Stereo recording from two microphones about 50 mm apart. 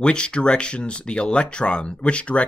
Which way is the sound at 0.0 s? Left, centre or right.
Centre.